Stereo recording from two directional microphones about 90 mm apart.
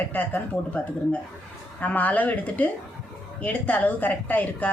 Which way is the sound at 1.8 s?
20° left (ahead or behind).